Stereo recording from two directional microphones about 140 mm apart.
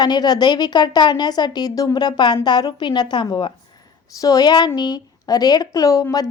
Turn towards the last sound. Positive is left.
turn(degrees=25)  # may be behind; listen again after turning